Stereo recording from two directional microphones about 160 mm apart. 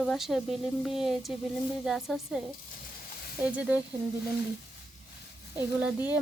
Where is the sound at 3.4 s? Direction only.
10° right (ahead or behind).